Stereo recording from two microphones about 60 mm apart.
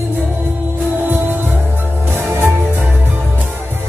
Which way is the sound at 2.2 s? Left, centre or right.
Right.